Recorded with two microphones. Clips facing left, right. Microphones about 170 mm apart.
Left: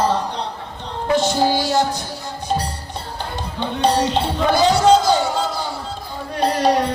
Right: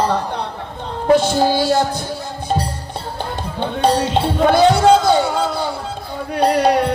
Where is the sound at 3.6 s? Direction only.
50° right (ahead or behind).